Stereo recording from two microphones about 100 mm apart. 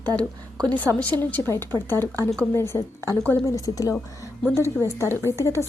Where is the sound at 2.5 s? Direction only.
25° left (ahead or behind).